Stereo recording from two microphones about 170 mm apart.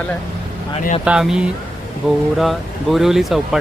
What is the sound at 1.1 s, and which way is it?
Speech, 5° right (ahead or behind).